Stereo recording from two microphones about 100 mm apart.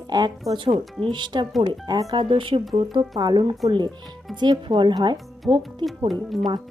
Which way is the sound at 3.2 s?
45° right (ahead or behind).